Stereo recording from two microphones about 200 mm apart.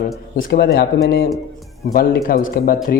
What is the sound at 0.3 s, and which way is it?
Speech, 50° left (ahead or behind).